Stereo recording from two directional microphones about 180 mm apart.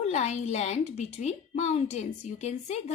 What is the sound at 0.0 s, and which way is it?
A woman's voice, 40° left (ahead or behind).